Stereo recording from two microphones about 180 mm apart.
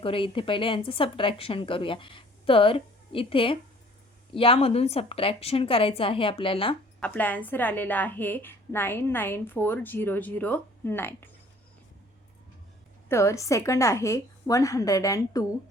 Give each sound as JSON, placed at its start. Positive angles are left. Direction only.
{"t": 0.0, "sound": "speech", "side_deg": 30}
{"t": 7.0, "sound": "a woman's voice", "side_deg": 10}
{"t": 13.1, "sound": "a woman's voice", "side_deg": 15}